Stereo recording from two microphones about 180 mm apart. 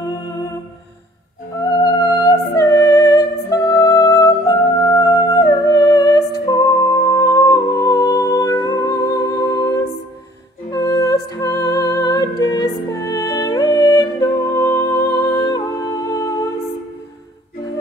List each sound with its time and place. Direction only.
1.6 s music: 20° left (ahead or behind)
10.7 s music: 20° left (ahead or behind)